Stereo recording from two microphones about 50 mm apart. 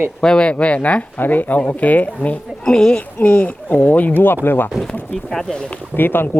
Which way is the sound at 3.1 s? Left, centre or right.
Left.